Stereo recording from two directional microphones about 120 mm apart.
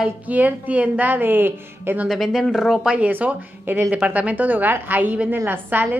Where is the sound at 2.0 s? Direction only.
Centre (ahead or behind).